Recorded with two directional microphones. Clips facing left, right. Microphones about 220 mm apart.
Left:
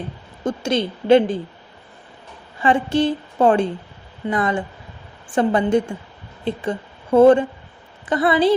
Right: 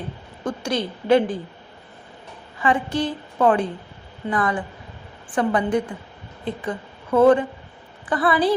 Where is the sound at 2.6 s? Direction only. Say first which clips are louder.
Left 4 dB; 30° left (ahead or behind).